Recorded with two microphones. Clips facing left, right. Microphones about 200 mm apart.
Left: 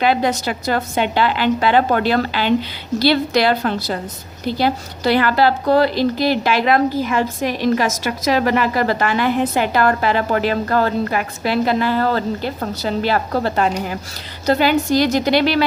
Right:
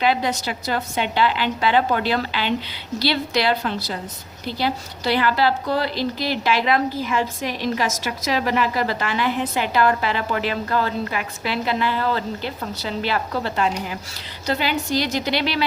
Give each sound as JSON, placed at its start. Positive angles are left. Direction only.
{"t": 0.0, "sound": "a woman's voice", "side_deg": 50}